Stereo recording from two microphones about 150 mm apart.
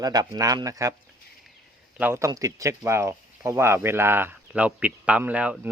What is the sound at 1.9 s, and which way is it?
Speech, 15° right (ahead or behind).